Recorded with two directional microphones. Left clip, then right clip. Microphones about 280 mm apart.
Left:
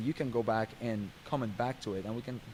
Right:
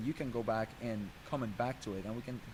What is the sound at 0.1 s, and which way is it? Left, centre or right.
Speech, left.